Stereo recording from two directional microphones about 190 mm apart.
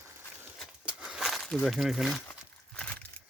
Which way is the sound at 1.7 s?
Centre (ahead or behind).